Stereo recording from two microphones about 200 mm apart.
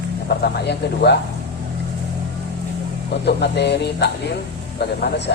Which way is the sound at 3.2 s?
55° left (ahead or behind).